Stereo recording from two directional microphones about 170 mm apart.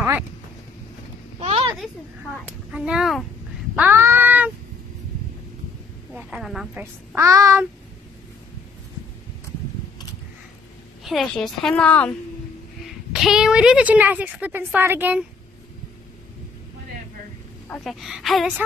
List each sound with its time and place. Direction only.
1.4 s a sound: 35° right (ahead or behind)
2.7 s speech: 5° right (ahead or behind)
3.7 s a sound: 10° right (ahead or behind)
6.1 s speech: centre (ahead or behind)
7.2 s a woman's voice: 20° right (ahead or behind)
11.1 s speech: centre (ahead or behind)
12.8 s a woman's voice: centre (ahead or behind)
17.8 s speech: centre (ahead or behind)